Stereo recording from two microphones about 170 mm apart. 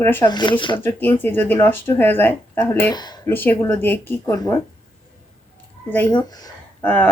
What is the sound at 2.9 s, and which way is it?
Speech, 25° left (ahead or behind).